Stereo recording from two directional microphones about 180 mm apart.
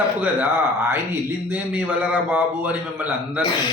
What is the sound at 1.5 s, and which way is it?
Speech, 10° right (ahead or behind).